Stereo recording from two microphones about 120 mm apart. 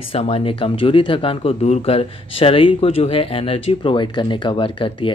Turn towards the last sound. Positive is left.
turn(degrees=45)  # may be behind; listen again after turning